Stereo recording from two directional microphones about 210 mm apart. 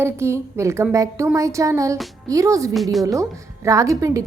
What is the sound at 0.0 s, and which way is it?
A woman's voice, 10° right (ahead or behind).